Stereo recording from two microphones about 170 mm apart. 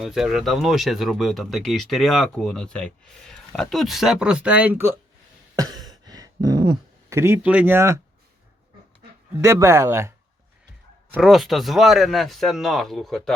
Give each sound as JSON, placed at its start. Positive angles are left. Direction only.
{"t": 0.0, "sound": "speech", "side_deg": 0}
{"t": 5.5, "sound": "a sound", "side_deg": -20}
{"t": 9.4, "sound": "speech", "side_deg": -15}
{"t": 11.1, "sound": "speech", "side_deg": 0}